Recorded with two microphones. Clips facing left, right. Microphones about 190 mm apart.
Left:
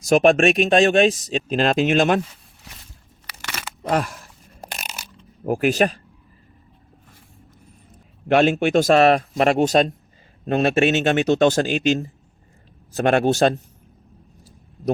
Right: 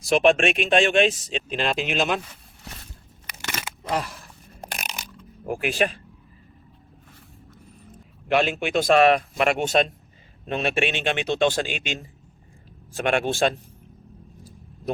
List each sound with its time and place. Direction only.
0.0 s speech: 45° left (ahead or behind)
3.8 s speech: 55° left (ahead or behind)
4.6 s a sound: 5° left (ahead or behind)
5.5 s speech: 40° left (ahead or behind)
8.3 s a man's voice: 45° left (ahead or behind)